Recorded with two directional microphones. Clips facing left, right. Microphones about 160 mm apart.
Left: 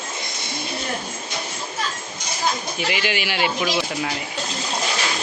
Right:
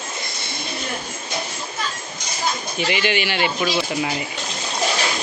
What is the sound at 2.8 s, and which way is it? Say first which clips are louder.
Speech: right 4 dB; 5° left (ahead or behind).